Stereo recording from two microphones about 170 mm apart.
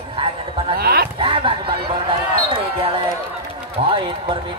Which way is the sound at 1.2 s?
30° right (ahead or behind).